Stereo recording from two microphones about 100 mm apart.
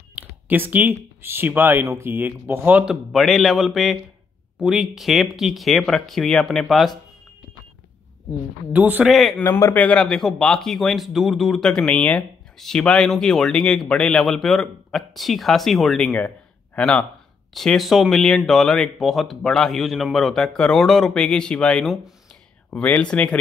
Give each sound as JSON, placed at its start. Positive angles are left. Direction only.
{"t": 0.2, "sound": "a sound", "side_deg": -15}
{"t": 0.5, "sound": "speech", "side_deg": -15}
{"t": 2.8, "sound": "speech", "side_deg": -5}
{"t": 8.7, "sound": "speech", "side_deg": -15}
{"t": 9.0, "sound": "speech", "side_deg": 0}
{"t": 9.4, "sound": "speech", "side_deg": 25}
{"t": 9.8, "sound": "speech", "side_deg": 10}
{"t": 16.7, "sound": "speech", "side_deg": 10}
{"t": 17.6, "sound": "speech", "side_deg": 0}
{"t": 22.7, "sound": "speech", "side_deg": 15}